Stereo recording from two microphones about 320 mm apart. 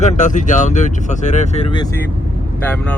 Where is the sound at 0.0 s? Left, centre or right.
Left.